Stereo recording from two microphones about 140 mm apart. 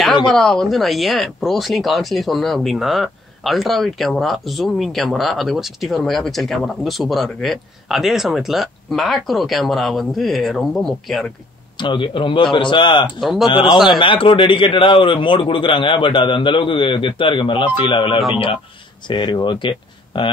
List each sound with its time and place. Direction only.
0.3 s speech: 5° left (ahead or behind)
11.7 s a man's voice: 35° left (ahead or behind)
13.0 s speech: centre (ahead or behind)
13.5 s a man's voice: 35° left (ahead or behind)